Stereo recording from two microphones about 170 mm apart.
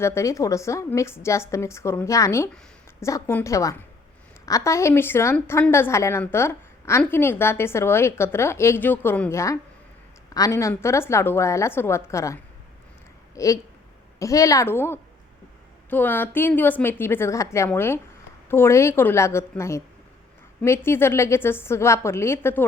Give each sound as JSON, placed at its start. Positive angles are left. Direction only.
{"t": 0.0, "sound": "a woman's voice", "side_deg": 15}